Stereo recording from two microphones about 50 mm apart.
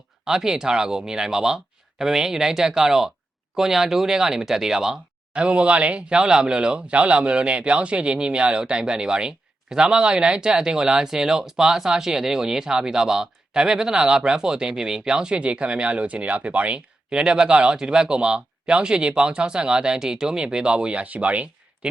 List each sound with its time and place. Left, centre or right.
0.3 s speech: centre
5.3 s speech: right